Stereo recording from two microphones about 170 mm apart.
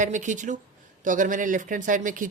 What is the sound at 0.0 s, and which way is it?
Speech, 45° right (ahead or behind).